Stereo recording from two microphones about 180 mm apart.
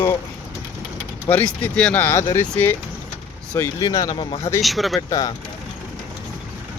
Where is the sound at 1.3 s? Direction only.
10° left (ahead or behind).